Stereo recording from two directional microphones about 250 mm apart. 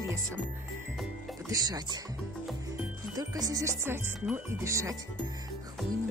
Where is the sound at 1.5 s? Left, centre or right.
Centre.